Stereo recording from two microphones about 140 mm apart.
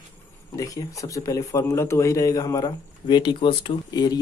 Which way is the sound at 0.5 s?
25° left (ahead or behind).